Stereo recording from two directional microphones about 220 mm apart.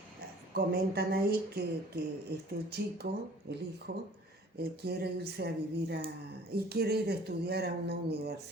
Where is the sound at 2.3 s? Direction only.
50° right (ahead or behind).